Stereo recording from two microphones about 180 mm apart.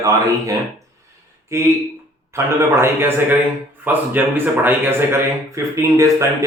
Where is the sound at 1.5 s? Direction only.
15° right (ahead or behind).